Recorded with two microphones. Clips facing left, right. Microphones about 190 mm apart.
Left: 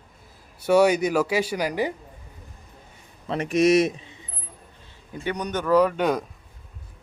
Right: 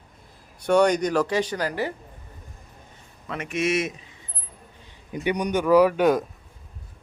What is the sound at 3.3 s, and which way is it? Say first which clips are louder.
Speech: left 6 dB; 35° left (ahead or behind).